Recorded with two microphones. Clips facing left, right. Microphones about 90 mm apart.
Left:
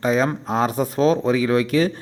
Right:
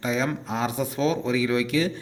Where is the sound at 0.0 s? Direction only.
45° left (ahead or behind).